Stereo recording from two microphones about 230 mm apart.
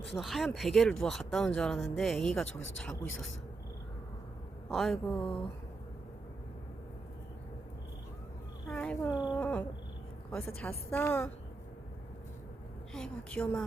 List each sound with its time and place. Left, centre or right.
0.2 s speech: centre
4.7 s speech: centre
8.7 s speech: centre
12.9 s speech: centre